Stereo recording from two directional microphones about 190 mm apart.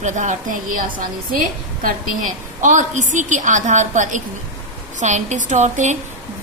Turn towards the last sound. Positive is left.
turn(degrees=-40)  # may be behind; listen again after turning